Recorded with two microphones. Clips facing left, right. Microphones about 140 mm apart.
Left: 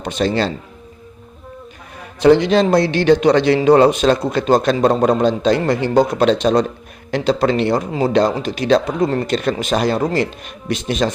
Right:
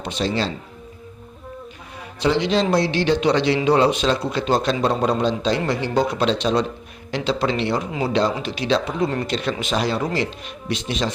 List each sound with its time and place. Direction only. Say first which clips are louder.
0.0 s a man's voice: left 5 dB; 50° left (ahead or behind)
2.2 s a man's voice: left 7 dB; 50° left (ahead or behind)